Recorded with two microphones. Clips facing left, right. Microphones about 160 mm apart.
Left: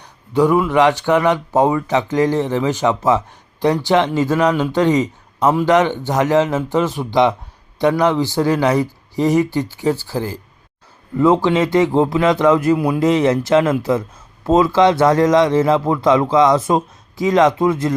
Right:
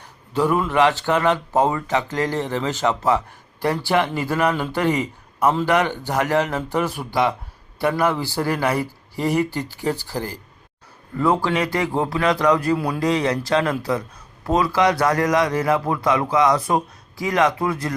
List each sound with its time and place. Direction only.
0.0 s speech: 15° left (ahead or behind)
11.4 s a man's voice: 20° left (ahead or behind)